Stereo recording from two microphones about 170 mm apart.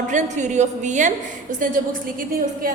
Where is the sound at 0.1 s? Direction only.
45° right (ahead or behind).